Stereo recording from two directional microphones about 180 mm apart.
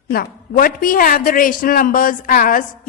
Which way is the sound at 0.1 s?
55° left (ahead or behind).